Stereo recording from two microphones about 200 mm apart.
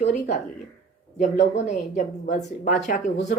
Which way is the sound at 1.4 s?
35° left (ahead or behind).